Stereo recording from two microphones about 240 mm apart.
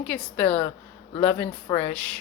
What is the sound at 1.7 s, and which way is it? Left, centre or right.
Speech, centre.